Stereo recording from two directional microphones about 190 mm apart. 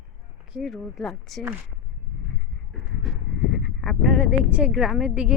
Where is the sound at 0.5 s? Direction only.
Centre (ahead or behind).